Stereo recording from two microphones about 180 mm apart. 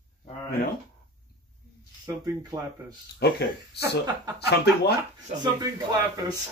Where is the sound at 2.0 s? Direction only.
20° right (ahead or behind).